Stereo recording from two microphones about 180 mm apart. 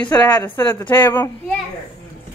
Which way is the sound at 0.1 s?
20° left (ahead or behind).